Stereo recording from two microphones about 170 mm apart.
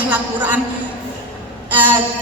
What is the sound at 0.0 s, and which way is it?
Speech, 10° right (ahead or behind).